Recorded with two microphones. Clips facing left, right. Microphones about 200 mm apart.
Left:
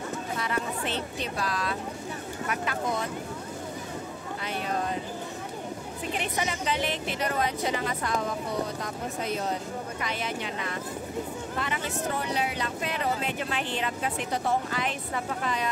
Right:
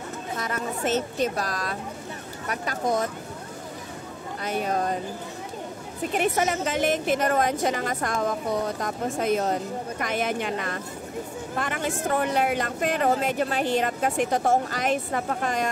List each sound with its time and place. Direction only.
0.4 s speech: 45° right (ahead or behind)
4.5 s a woman's voice: 45° right (ahead or behind)
6.1 s a woman's voice: 45° right (ahead or behind)